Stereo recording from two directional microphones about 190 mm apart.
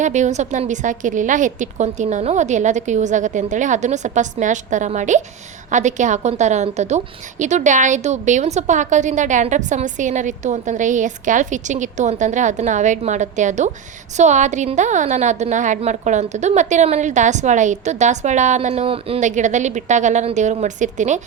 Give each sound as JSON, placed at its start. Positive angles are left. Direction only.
{"t": 0.0, "sound": "a woman's voice", "side_deg": -40}